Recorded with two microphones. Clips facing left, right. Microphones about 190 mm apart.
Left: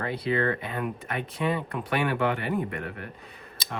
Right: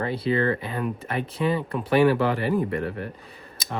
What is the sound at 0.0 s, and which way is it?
Speech, 30° right (ahead or behind).